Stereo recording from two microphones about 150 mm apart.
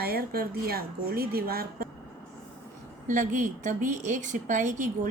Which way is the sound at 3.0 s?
60° right (ahead or behind).